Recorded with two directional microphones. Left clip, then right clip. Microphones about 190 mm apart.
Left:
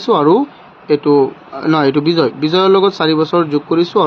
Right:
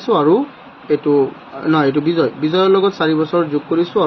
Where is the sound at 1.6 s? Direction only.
65° left (ahead or behind).